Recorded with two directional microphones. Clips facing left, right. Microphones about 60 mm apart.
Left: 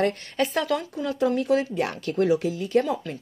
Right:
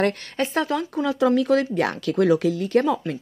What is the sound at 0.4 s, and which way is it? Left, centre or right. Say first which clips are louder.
Speech: even; right.